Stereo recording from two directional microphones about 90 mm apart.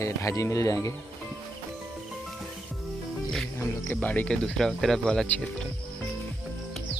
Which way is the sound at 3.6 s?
20° left (ahead or behind).